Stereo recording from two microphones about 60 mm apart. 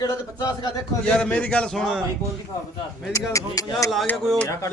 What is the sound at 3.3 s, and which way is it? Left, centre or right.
Speech, left.